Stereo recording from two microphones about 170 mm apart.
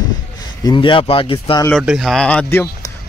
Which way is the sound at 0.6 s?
30° left (ahead or behind).